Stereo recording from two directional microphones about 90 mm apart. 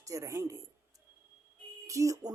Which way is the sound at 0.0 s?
40° right (ahead or behind).